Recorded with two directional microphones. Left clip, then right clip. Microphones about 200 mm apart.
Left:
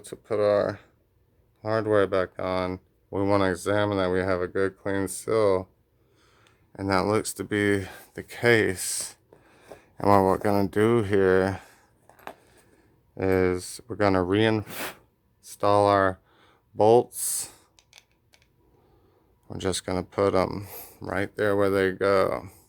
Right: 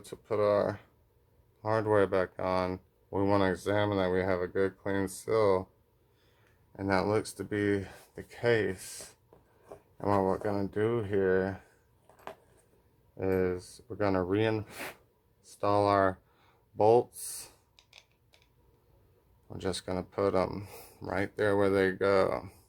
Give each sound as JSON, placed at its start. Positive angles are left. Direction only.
{"t": 0.0, "sound": "speech", "side_deg": 20}
{"t": 6.7, "sound": "speech", "side_deg": 30}
{"t": 12.1, "sound": "a sound", "side_deg": 25}
{"t": 13.1, "sound": "speech", "side_deg": 45}
{"t": 17.7, "sound": "a sound", "side_deg": 15}
{"t": 19.5, "sound": "speech", "side_deg": 30}